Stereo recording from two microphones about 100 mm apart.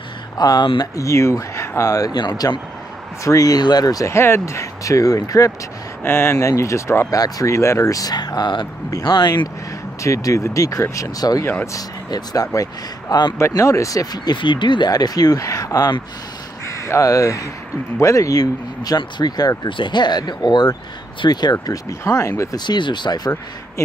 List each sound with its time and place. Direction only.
0.4 s speech: 40° left (ahead or behind)
10.0 s speech: 30° left (ahead or behind)
22.7 s speech: 50° left (ahead or behind)